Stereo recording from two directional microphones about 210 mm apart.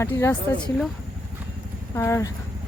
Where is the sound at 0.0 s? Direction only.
10° left (ahead or behind).